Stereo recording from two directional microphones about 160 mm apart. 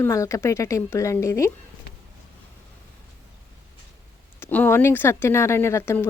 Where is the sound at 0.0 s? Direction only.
20° left (ahead or behind).